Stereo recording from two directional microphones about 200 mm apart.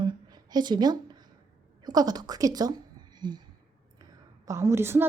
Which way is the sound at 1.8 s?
20° right (ahead or behind).